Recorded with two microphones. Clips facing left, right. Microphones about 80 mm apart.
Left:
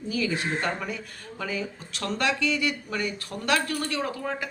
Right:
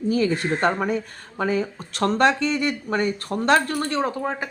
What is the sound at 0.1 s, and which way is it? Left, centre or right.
Speech, right.